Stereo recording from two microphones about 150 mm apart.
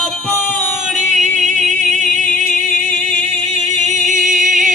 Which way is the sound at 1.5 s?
55° right (ahead or behind).